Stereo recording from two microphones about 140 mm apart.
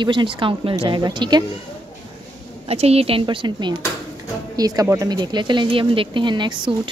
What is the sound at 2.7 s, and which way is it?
Speech, 45° right (ahead or behind).